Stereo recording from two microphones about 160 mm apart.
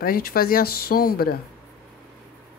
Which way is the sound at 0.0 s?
70° left (ahead or behind).